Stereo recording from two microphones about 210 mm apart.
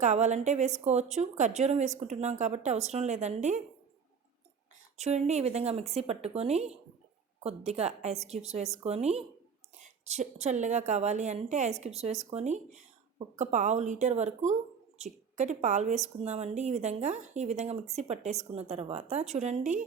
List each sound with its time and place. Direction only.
0.0 s speech: 35° right (ahead or behind)
4.9 s speech: 30° right (ahead or behind)